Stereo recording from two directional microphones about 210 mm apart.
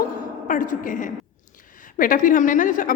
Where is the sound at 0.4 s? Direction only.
40° left (ahead or behind).